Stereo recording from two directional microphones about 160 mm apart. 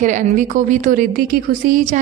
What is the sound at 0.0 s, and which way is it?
A woman's voice, 50° right (ahead or behind).